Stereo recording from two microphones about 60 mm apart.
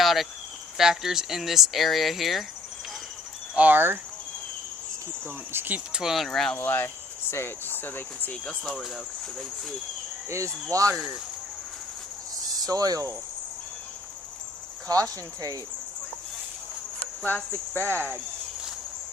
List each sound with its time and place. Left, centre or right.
0.0 s cricket: centre
0.8 s speech: centre
3.5 s speech: right
5.5 s speech: right
6.0 s speech: centre
6.2 s speech: centre
6.6 s speech: left
8.6 s speech: centre
10.2 s speech: right
12.5 s speech: right
17.2 s speech: left